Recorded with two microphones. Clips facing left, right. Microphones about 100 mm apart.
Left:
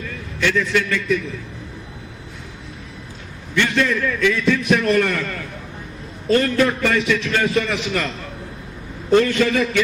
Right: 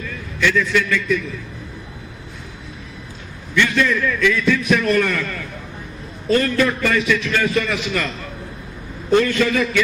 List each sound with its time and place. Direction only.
0.0 s a man's voice: 40° left (ahead or behind)
3.5 s a man's voice: 40° left (ahead or behind)
9.1 s a man's voice: 35° left (ahead or behind)